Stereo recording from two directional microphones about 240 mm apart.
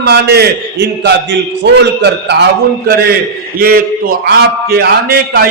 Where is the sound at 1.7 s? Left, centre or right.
Right.